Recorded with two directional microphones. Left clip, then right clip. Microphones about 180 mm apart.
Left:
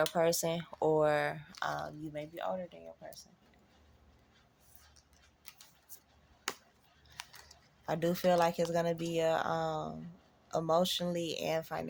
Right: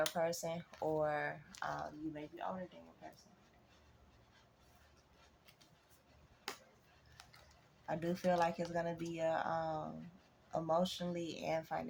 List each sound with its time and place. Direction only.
0.1 s speech: 60° left (ahead or behind)
6.5 s chop: 25° left (ahead or behind)
7.2 s scissors: 15° left (ahead or behind)
7.9 s speech: 60° left (ahead or behind)